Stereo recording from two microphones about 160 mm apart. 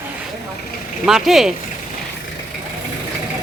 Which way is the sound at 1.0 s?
Centre (ahead or behind).